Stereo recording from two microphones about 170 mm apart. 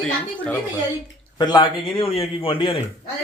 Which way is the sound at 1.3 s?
25° left (ahead or behind).